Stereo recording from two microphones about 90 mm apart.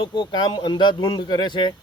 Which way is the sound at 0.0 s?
60° left (ahead or behind).